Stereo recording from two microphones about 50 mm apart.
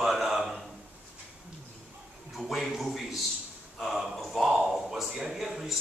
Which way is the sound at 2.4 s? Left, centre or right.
Centre.